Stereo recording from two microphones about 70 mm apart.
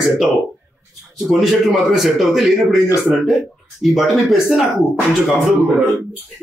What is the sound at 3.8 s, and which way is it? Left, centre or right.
Speech, centre.